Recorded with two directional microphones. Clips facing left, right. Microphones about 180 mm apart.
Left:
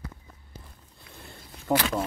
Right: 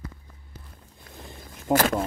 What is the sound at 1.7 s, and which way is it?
Speech, 45° right (ahead or behind).